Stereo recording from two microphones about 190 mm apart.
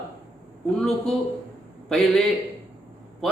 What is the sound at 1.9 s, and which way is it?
Speech, centre (ahead or behind).